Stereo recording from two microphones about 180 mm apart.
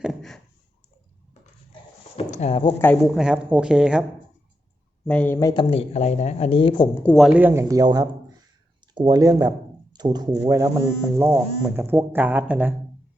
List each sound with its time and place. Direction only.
0.0 s a sound: centre (ahead or behind)
2.1 s a sound: 35° left (ahead or behind)
3.2 s a woman's voice: 5° right (ahead or behind)
5.0 s speech: 10° left (ahead or behind)
5.7 s speech: 40° left (ahead or behind)
7.0 s speech: centre (ahead or behind)